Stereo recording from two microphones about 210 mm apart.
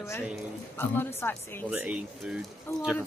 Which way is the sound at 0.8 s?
10° left (ahead or behind).